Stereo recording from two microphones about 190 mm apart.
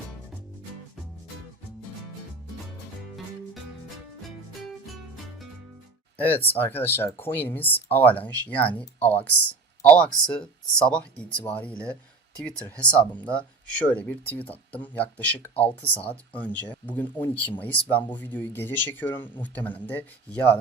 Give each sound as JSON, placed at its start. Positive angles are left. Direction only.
{"t": 6.1, "sound": "speech", "side_deg": 10}
{"t": 9.8, "sound": "speech", "side_deg": 5}